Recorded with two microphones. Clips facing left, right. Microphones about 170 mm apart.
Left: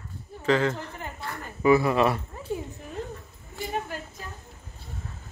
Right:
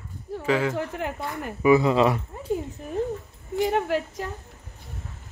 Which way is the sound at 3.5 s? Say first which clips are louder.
Right 9 dB; 80° right.